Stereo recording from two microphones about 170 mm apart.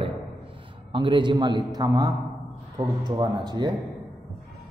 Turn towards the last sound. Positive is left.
turn(degrees=-25)  # may be behind; listen again after turning